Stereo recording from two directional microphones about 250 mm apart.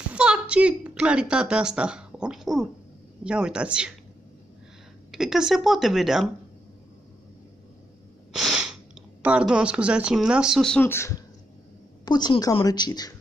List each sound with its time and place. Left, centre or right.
0.1 s a woman's voice: centre
5.1 s speech: centre
8.3 s sneeze: centre
9.2 s a woman's voice: centre